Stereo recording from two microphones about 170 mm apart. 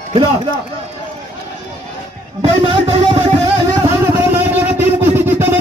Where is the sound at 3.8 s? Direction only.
15° right (ahead or behind).